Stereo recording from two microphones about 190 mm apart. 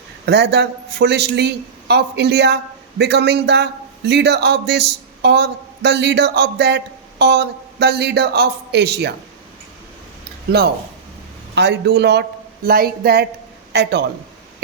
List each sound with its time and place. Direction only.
0.3 s a man's voice: 60° right (ahead or behind)
10.5 s a man's voice: 55° right (ahead or behind)